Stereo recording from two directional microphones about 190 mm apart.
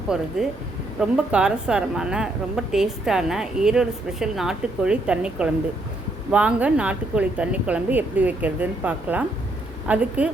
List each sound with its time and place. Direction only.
0.1 s a woman's voice: 5° right (ahead or behind)